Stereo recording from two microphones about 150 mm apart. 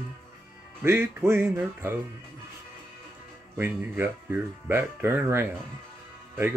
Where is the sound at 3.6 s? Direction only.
15° right (ahead or behind).